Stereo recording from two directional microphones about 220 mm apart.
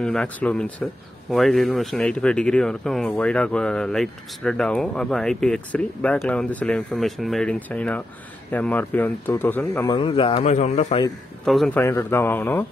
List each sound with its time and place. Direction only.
0.0 s a man's voice: 5° left (ahead or behind)
9.9 s speech: 25° left (ahead or behind)
11.4 s a man's voice: centre (ahead or behind)